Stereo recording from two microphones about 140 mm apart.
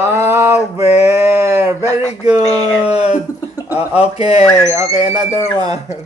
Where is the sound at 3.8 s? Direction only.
45° left (ahead or behind).